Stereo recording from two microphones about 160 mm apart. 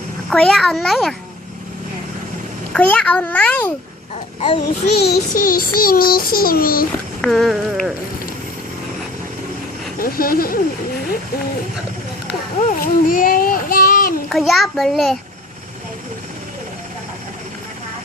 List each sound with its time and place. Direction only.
0.3 s a child's voice: 5° left (ahead or behind)
2.7 s a child's voice: 5° left (ahead or behind)
4.9 s child singing: 90° left
5.3 s child singing: 60° left (ahead or behind)
7.2 s a child's voice: centre (ahead or behind)
10.0 s child singing: 65° left (ahead or behind)
12.5 s speech: 55° left (ahead or behind)
14.3 s a child's voice: centre (ahead or behind)